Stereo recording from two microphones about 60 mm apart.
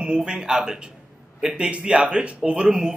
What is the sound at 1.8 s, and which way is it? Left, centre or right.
A man's voice, centre.